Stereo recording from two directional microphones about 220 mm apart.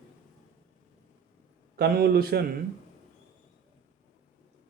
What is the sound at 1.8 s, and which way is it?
Speech, 45° right (ahead or behind).